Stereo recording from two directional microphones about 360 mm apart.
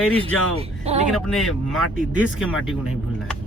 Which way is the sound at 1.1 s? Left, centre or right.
Centre.